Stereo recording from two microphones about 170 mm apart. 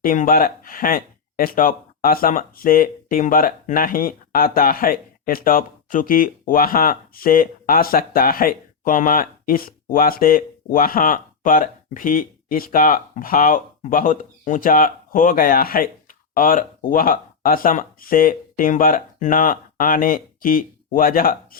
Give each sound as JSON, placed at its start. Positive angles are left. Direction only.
{"t": 0.0, "sound": "speech", "side_deg": 55}